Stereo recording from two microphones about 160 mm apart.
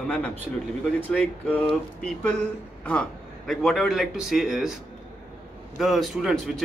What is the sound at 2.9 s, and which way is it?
Speech, 5° left (ahead or behind).